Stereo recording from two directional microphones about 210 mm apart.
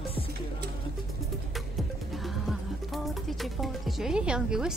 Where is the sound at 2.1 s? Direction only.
Centre (ahead or behind).